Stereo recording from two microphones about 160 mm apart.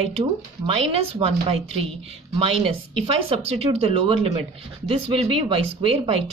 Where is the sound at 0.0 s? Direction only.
35° right (ahead or behind).